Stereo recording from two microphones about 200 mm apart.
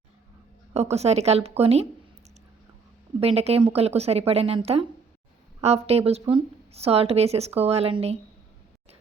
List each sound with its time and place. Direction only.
0.7 s speech: 30° right (ahead or behind)
3.2 s speech: 30° right (ahead or behind)